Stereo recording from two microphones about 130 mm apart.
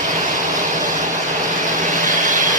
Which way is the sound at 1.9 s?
75° right (ahead or behind).